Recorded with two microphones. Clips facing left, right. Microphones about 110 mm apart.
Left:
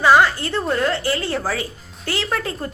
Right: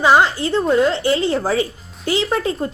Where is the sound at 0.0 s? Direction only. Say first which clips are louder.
Right 1 dB; 20° right (ahead or behind).